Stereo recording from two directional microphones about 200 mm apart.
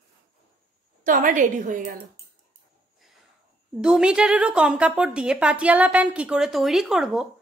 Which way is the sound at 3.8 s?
5° right (ahead or behind).